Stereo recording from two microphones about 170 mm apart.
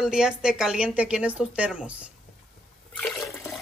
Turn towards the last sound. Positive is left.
turn(degrees=5)  # may be behind; listen again after turning